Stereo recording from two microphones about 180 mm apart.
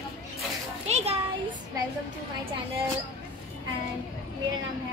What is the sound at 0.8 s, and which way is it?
Speech, 35° right (ahead or behind).